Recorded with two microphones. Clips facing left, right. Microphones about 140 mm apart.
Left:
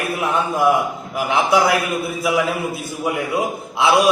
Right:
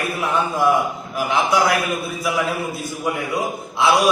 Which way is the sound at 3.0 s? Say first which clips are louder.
Left 2 dB; 20° left (ahead or behind).